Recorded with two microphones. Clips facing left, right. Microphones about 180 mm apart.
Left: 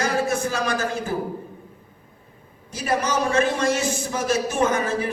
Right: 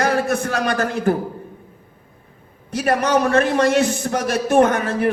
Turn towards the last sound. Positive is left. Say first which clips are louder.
# right 4 dB
turn(degrees=-60)  # may be behind; listen again after turning